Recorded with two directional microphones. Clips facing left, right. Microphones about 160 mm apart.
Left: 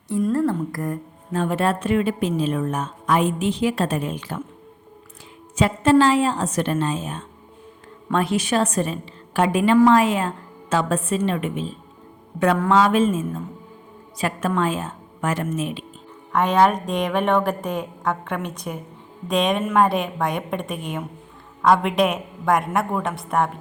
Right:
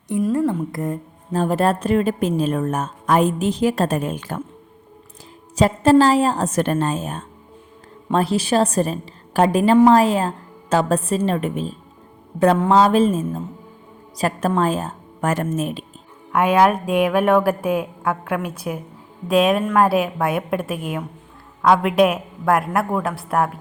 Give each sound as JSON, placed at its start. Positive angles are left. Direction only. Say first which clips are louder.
{"t": 0.2, "sound": "a woman's voice", "louder": "right 1 dB", "side_deg": -5}
{"t": 0.4, "sound": "speech", "louder": "right 1 dB", "side_deg": -20}
{"t": 1.3, "sound": "a woman's voice", "louder": "right 3 dB", "side_deg": -35}
{"t": 5.5, "sound": "a woman's voice", "louder": "right 3 dB", "side_deg": -35}
{"t": 8.1, "sound": "a woman's voice", "louder": "right 3 dB", "side_deg": -35}
{"t": 12.7, "sound": "a woman's voice", "louder": "right 2 dB", "side_deg": -35}
{"t": 16.3, "sound": "a woman's voice", "louder": "right 2 dB", "side_deg": -10}